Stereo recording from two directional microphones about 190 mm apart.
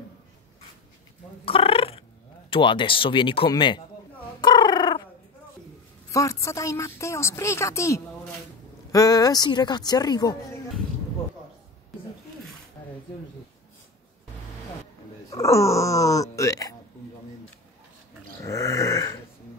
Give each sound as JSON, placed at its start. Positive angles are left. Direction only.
{"t": 1.4, "sound": "purr", "side_deg": 30}
{"t": 2.5, "sound": "speech", "side_deg": 25}
{"t": 4.4, "sound": "bird", "side_deg": 25}
{"t": 6.1, "sound": "a woman's voice", "side_deg": 15}
{"t": 15.2, "sound": "a woman's voice", "side_deg": 15}
{"t": 18.4, "sound": "a sound", "side_deg": 15}